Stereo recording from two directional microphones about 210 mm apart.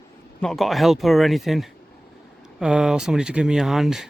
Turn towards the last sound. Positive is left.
turn(degrees=0)  # may be behind; listen again after turning